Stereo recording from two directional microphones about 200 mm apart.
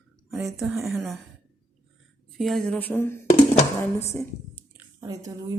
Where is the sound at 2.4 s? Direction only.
Centre (ahead or behind).